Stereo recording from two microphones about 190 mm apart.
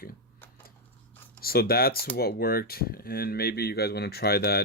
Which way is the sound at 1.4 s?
50° left (ahead or behind).